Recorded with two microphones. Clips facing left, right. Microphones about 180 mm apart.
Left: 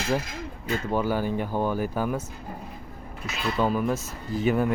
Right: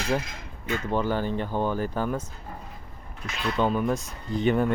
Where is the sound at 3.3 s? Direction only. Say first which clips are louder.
Even; 5° left (ahead or behind).